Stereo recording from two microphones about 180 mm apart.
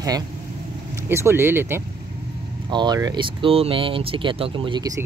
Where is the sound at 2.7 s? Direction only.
25° right (ahead or behind).